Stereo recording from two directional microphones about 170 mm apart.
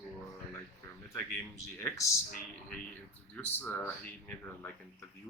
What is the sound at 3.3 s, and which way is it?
Speech, 10° left (ahead or behind).